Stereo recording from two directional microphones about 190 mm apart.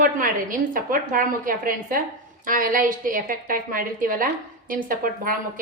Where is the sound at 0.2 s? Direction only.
45° right (ahead or behind).